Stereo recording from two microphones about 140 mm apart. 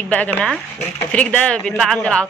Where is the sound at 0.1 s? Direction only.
10° left (ahead or behind).